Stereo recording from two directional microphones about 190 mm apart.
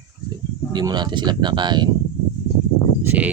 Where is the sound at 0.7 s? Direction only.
25° right (ahead or behind).